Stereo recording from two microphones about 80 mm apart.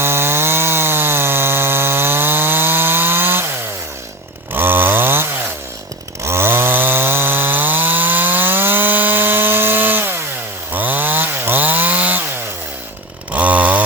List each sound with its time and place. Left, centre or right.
0.0 s chainsaw: right
4.5 s chainsaw: right
13.3 s chainsaw: centre